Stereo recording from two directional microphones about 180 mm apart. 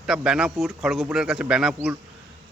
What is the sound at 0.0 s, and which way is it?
Speech, 5° right (ahead or behind).